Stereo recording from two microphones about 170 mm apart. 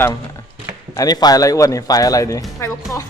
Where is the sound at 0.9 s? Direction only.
25° left (ahead or behind).